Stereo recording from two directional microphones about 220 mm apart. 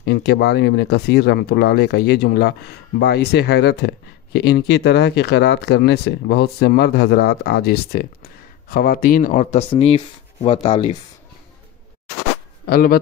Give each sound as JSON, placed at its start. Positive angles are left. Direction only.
{"t": 0.0, "sound": "speech", "side_deg": 45}
{"t": 12.6, "sound": "speech", "side_deg": 45}